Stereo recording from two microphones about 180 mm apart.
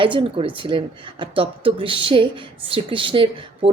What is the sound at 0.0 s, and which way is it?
Speech, 30° right (ahead or behind).